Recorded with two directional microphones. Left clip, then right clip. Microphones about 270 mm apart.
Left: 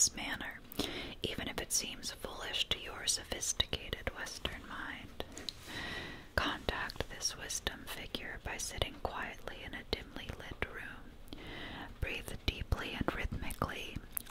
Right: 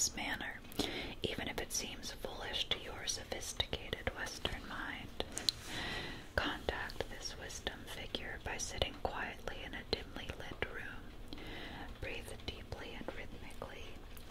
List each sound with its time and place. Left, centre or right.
0.0 s whispering: centre
12.6 s whispering: left